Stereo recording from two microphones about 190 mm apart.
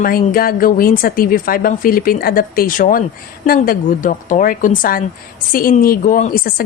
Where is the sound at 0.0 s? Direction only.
50° left (ahead or behind).